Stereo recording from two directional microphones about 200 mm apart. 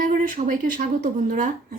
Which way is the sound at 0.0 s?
40° right (ahead or behind).